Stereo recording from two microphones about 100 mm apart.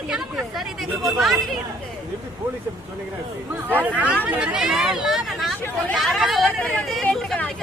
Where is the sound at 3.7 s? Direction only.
15° right (ahead or behind).